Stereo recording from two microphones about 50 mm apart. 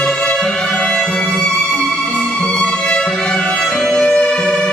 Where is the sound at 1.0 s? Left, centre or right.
Centre.